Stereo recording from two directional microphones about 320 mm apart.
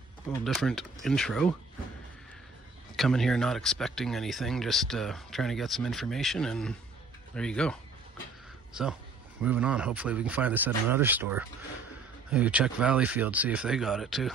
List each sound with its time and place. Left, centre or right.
0.3 s speech: centre
3.0 s speech: centre
9.4 s speech: centre